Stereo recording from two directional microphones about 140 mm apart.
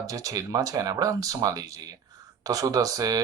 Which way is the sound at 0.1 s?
25° right (ahead or behind).